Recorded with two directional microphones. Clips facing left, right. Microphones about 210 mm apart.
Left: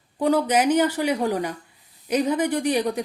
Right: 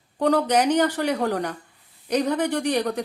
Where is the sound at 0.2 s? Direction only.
5° left (ahead or behind).